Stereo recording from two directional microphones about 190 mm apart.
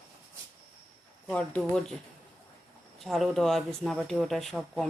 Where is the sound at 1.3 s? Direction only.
5° left (ahead or behind).